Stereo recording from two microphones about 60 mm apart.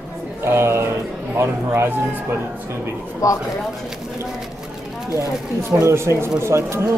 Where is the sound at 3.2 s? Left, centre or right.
Left.